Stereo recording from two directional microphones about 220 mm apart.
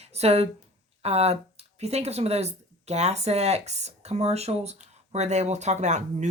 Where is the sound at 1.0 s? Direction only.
30° right (ahead or behind).